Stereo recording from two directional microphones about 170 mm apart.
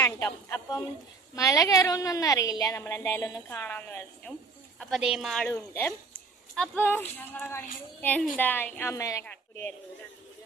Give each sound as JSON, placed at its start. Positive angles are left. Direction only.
{"t": 0.0, "sound": "a woman's voice", "side_deg": 15}
{"t": 4.8, "sound": "a woman's voice", "side_deg": 0}